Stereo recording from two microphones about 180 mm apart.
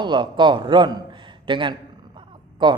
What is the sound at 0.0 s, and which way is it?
A man's voice, 25° right (ahead or behind).